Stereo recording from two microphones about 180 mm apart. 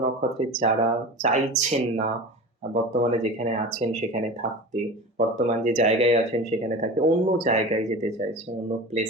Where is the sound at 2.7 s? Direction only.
40° right (ahead or behind).